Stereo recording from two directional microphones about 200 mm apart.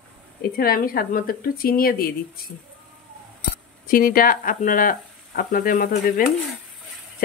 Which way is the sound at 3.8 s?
45° left (ahead or behind).